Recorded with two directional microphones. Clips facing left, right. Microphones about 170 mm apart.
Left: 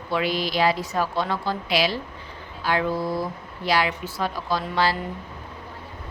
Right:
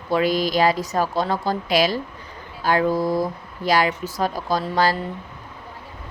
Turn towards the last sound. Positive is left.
turn(degrees=-40)  # may be behind; listen again after turning